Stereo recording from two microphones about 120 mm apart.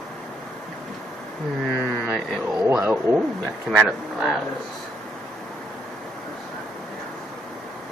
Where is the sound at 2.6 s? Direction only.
20° right (ahead or behind).